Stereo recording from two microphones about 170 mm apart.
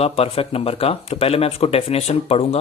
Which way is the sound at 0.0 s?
35° left (ahead or behind).